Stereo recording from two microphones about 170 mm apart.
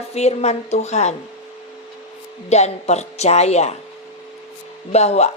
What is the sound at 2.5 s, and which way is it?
Speech, 40° left (ahead or behind).